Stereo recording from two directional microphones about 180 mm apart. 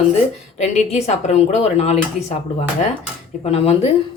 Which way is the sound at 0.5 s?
40° left (ahead or behind).